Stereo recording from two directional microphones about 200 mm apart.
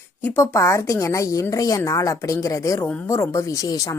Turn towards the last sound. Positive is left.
turn(degrees=15)  # may be behind; listen again after turning